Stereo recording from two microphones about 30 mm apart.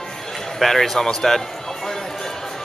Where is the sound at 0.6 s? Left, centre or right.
Centre.